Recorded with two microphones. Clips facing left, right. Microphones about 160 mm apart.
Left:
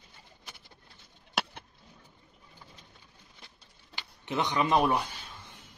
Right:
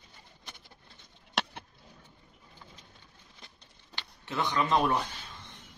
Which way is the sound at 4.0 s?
20° left (ahead or behind).